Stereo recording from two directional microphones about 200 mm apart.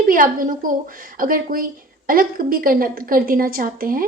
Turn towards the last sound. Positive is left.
turn(degrees=-45)  # may be behind; listen again after turning